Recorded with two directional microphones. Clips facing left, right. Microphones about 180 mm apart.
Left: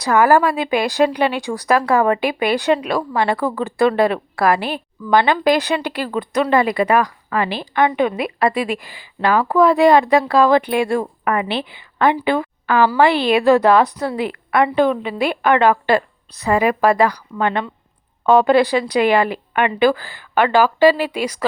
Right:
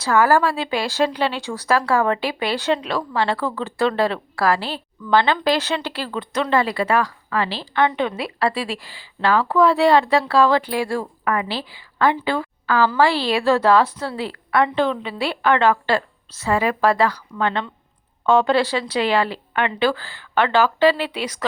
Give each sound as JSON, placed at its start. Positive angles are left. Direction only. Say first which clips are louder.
{"t": 0.0, "sound": "a woman's voice", "louder": "left 3 dB", "side_deg": 15}